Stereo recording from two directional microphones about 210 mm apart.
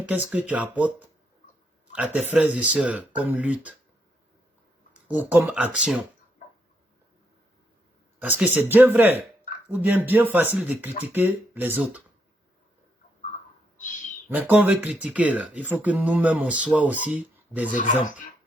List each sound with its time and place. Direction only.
0.0 s speech: 5° right (ahead or behind)
2.1 s speech: 5° right (ahead or behind)
5.0 s speech: 10° right (ahead or behind)
8.2 s speech: 10° right (ahead or behind)
14.3 s speech: 10° right (ahead or behind)
17.7 s speech: 35° left (ahead or behind)